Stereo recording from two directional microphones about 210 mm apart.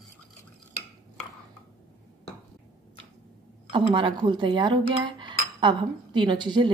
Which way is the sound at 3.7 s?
25° right (ahead or behind).